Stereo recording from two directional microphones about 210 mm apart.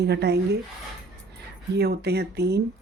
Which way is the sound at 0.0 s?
50° right (ahead or behind).